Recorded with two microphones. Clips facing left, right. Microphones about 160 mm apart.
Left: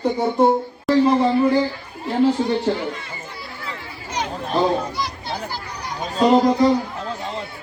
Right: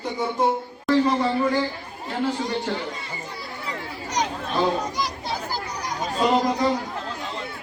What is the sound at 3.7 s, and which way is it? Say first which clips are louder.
Chatter: right 2 dB; 40° right (ahead or behind).